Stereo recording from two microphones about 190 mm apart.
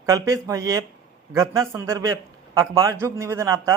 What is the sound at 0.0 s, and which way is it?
Speech, 15° right (ahead or behind).